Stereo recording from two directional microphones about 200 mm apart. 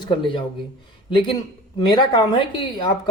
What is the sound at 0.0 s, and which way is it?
Speech, 25° left (ahead or behind).